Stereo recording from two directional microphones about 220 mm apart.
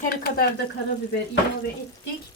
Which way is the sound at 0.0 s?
45° left (ahead or behind).